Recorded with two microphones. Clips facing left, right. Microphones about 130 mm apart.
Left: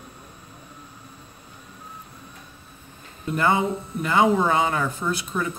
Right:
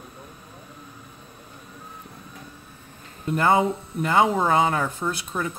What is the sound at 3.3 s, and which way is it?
Speech, 40° right (ahead or behind).